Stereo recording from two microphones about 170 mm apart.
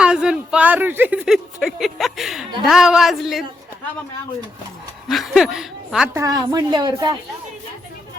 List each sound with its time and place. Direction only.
0.0 s speech: 5° right (ahead or behind)
5.0 s speech: centre (ahead or behind)
6.1 s a woman's voice: 20° right (ahead or behind)